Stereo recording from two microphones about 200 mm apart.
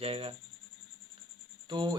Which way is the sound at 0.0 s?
30° right (ahead or behind).